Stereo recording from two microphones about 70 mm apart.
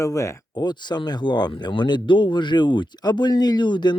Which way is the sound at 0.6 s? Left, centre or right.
Left.